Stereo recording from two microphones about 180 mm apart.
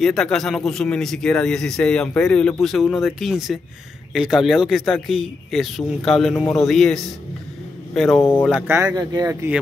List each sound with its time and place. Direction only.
0.0 s speech: centre (ahead or behind)
8.2 s speech: 10° left (ahead or behind)
8.5 s speech: 10° right (ahead or behind)